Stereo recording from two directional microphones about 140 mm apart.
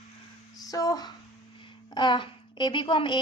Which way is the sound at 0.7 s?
25° left (ahead or behind).